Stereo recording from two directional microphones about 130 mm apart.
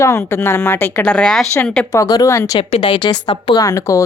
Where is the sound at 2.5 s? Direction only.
40° left (ahead or behind); by 4.0 s 25° left (ahead or behind).